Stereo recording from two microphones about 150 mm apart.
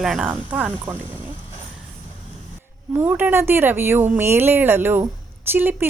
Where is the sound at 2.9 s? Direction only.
10° right (ahead or behind).